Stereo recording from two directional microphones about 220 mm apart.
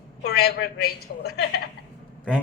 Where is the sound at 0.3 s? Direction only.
45° left (ahead or behind).